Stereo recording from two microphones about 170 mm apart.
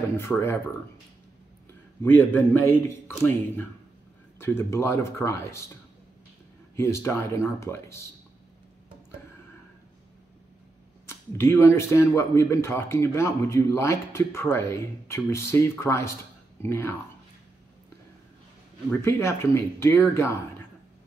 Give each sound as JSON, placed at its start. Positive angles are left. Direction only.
{"t": 0.2, "sound": "speech", "side_deg": 15}
{"t": 1.7, "sound": "a man's voice", "side_deg": 10}
{"t": 6.8, "sound": "speech", "side_deg": 15}
{"t": 11.3, "sound": "speech", "side_deg": 15}
{"t": 18.9, "sound": "speech", "side_deg": 15}